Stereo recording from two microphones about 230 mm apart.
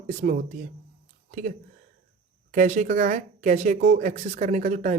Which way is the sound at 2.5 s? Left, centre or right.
Right.